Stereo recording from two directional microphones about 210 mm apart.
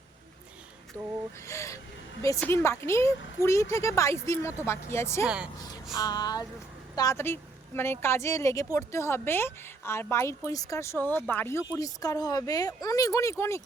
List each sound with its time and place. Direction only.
1.5 s speech: 15° left (ahead or behind)
5.2 s speech: 5° right (ahead or behind)
5.5 s speech: 20° left (ahead or behind)
6.0 s a sound: 20° left (ahead or behind)
6.9 s speech: 15° left (ahead or behind)